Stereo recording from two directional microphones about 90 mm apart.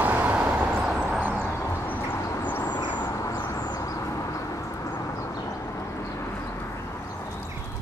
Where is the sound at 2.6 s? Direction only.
55° left (ahead or behind).